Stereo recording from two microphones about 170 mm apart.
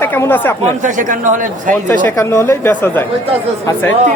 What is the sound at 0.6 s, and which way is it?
A man's voice, 50° right (ahead or behind).